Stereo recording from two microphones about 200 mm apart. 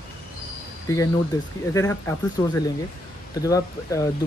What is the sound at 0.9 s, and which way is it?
Speech, 15° left (ahead or behind).